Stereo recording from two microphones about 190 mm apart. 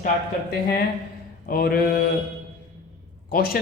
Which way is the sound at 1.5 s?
50° left (ahead or behind).